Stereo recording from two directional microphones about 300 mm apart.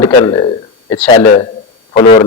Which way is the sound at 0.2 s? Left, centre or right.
Centre.